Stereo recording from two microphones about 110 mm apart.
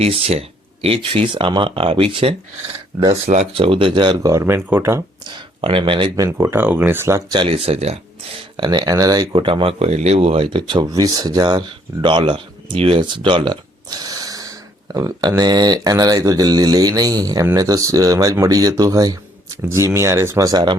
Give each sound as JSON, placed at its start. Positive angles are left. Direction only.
{"t": 0.0, "sound": "speech", "side_deg": -65}
{"t": 3.1, "sound": "speech", "side_deg": -70}
{"t": 5.6, "sound": "speech", "side_deg": -55}
{"t": 6.3, "sound": "speech", "side_deg": -25}
{"t": 7.3, "sound": "speech", "side_deg": -60}
{"t": 8.5, "sound": "speech", "side_deg": -45}
{"t": 9.3, "sound": "speech", "side_deg": -50}
{"t": 12.0, "sound": "speech", "side_deg": -50}